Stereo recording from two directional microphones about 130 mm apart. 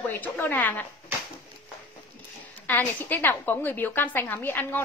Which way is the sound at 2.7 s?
15° left (ahead or behind).